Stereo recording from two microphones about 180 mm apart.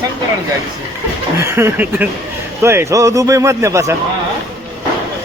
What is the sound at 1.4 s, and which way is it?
Speech, 15° right (ahead or behind).